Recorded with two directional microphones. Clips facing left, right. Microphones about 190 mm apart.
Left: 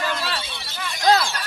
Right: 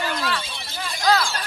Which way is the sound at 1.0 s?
30° left (ahead or behind).